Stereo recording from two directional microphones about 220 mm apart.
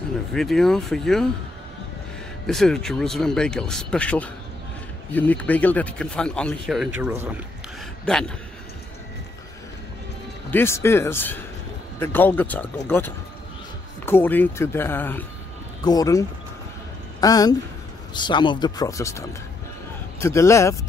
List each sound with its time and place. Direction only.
0.3 s speech: centre (ahead or behind)
2.4 s speech: centre (ahead or behind)
10.5 s speech: 10° left (ahead or behind)